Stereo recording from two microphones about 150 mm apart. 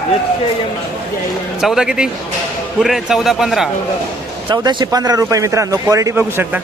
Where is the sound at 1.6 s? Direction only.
5° right (ahead or behind).